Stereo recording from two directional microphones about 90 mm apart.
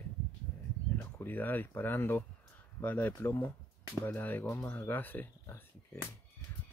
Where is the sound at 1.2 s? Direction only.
20° left (ahead or behind).